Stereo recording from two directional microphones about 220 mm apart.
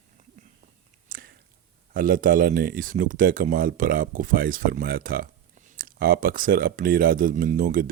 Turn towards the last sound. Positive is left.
turn(degrees=-40)  # may be behind; listen again after turning